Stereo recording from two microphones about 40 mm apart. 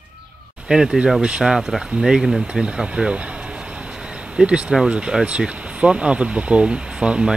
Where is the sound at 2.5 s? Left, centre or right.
Right.